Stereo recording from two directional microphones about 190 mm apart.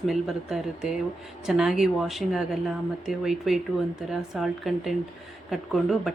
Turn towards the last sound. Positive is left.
turn(degrees=0)  # may be behind; listen again after turning